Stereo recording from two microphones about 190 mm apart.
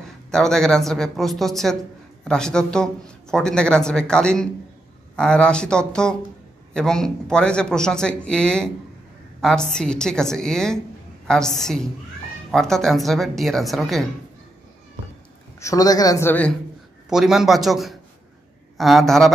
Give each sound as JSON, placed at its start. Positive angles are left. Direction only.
{"t": 0.3, "sound": "speech", "side_deg": 0}
{"t": 15.6, "sound": "speech", "side_deg": 20}
{"t": 17.1, "sound": "speech", "side_deg": 0}